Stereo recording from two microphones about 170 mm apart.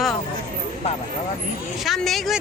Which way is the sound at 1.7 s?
Centre (ahead or behind).